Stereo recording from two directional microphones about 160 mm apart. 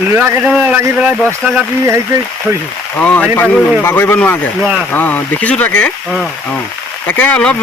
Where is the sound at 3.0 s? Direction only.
10° left (ahead or behind).